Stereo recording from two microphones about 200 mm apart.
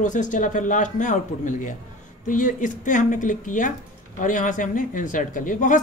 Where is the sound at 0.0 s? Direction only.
40° left (ahead or behind).